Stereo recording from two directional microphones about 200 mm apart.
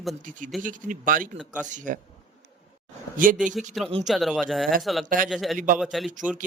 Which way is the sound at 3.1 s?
40° right (ahead or behind).